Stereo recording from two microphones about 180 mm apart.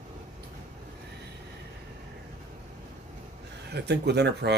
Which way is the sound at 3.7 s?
65° right (ahead or behind).